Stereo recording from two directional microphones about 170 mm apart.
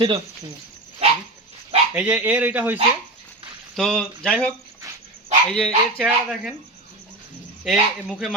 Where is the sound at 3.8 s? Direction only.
5° left (ahead or behind).